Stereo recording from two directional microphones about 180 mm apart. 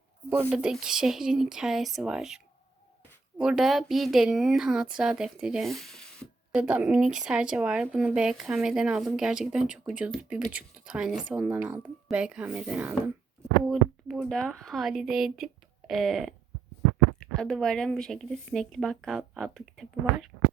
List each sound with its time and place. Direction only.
0.3 s speech: 10° right (ahead or behind)
6.6 s speech: 5° right (ahead or behind)
17.3 s speech: 5° left (ahead or behind)